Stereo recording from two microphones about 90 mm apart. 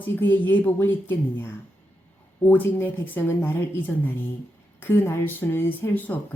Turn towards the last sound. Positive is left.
turn(degrees=20)  # may be behind; listen again after turning